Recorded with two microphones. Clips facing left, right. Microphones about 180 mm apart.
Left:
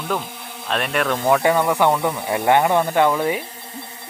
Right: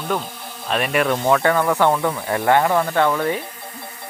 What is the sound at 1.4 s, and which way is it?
Speech, 20° left (ahead or behind).